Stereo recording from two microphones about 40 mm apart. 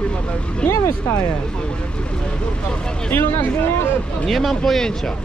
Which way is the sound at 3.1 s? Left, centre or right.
Left.